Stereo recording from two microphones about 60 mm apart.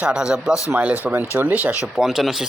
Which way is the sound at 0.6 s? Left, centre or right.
Right.